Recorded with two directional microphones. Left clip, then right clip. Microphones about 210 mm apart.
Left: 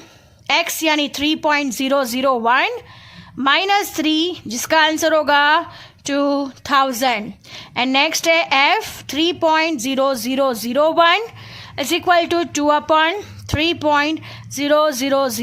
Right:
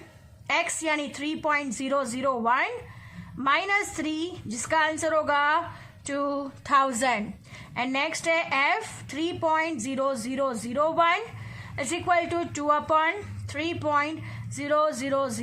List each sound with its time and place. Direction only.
0.4 s a woman's voice: 45° left (ahead or behind)